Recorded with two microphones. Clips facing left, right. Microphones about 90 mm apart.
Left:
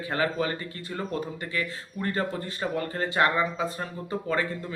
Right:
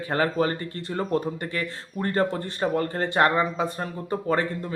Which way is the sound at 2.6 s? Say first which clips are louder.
Right 5 dB; 40° right (ahead or behind).